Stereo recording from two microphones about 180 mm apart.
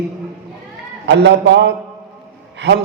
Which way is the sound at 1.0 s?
75° right (ahead or behind).